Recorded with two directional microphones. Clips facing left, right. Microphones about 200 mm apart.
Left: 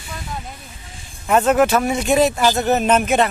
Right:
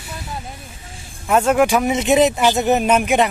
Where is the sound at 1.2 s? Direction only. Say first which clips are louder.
Even; 5° right (ahead or behind).